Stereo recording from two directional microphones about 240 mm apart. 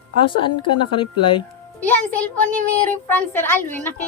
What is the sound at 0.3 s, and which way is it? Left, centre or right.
A woman's voice, left.